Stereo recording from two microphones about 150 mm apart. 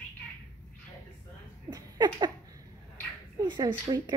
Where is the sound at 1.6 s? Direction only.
30° right (ahead or behind).